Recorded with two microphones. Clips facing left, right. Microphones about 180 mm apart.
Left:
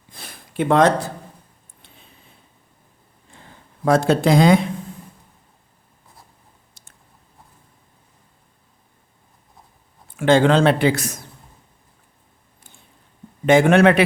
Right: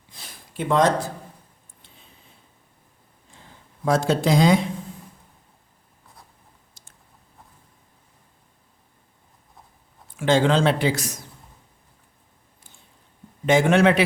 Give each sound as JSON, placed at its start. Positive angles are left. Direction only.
{"t": 0.1, "sound": "a sound", "side_deg": 60}
{"t": 3.3, "sound": "speech", "side_deg": 60}
{"t": 6.8, "sound": "chewing", "side_deg": 60}
{"t": 10.2, "sound": "a man's voice", "side_deg": 60}
{"t": 13.4, "sound": "a man's voice", "side_deg": 60}